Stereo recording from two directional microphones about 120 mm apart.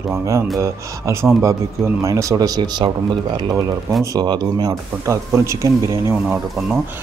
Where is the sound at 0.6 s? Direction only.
25° right (ahead or behind).